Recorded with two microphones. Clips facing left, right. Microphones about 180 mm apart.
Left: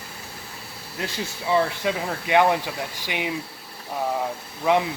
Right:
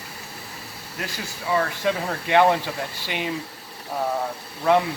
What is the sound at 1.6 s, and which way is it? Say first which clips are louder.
Speech: even; 10° left (ahead or behind).